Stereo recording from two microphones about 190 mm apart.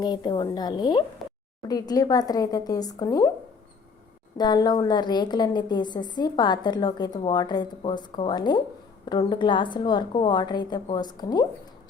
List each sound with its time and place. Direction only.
0.0 s a woman's voice: 20° left (ahead or behind)
4.4 s a woman's voice: 20° left (ahead or behind)